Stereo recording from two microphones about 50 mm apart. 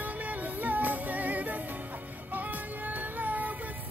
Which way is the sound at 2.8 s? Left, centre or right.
Right.